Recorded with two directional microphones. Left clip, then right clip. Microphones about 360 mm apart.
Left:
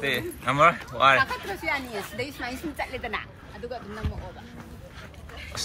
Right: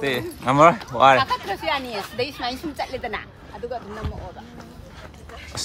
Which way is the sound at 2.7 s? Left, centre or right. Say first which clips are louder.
Right 3 dB; right.